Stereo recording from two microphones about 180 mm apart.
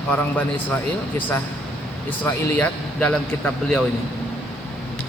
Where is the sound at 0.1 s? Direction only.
10° left (ahead or behind).